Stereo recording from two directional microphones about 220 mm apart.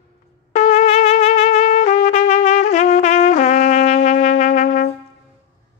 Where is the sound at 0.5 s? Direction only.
30° left (ahead or behind).